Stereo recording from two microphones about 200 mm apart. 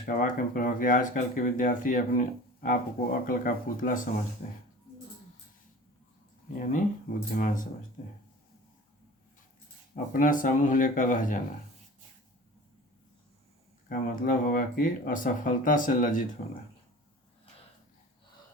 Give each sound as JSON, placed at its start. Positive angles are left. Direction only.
{"t": 0.0, "sound": "speech", "side_deg": 45}
{"t": 6.6, "sound": "speech", "side_deg": 40}
{"t": 9.9, "sound": "speech", "side_deg": 45}
{"t": 13.8, "sound": "speech", "side_deg": 40}